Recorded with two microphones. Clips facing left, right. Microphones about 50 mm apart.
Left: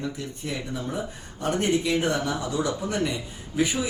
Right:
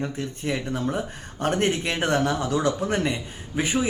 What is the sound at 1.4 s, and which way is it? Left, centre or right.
Speech, right.